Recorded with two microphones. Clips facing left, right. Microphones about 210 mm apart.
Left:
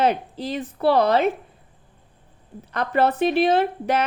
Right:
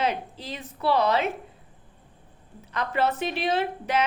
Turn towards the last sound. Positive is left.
turn(degrees=55)  # may be behind; listen again after turning